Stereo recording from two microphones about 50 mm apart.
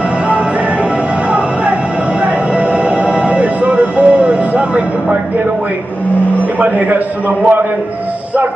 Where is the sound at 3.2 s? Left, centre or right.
Right.